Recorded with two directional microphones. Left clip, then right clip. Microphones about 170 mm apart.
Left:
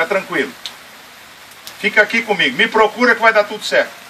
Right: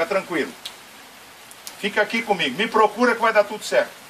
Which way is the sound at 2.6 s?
45° right (ahead or behind).